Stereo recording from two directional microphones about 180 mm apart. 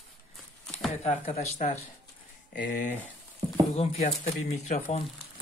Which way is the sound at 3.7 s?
35° left (ahead or behind).